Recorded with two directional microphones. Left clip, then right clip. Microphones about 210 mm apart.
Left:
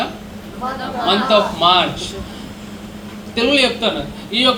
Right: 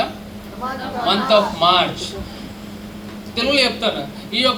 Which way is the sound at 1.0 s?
25° right (ahead or behind).